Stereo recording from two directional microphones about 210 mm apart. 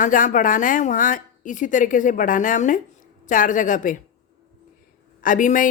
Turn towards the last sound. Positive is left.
turn(degrees=40)  # may be behind; listen again after turning